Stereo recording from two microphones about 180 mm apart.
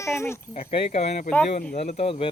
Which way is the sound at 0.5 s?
30° left (ahead or behind).